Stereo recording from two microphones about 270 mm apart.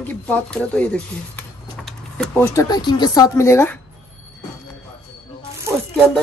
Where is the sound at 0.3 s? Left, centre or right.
Centre.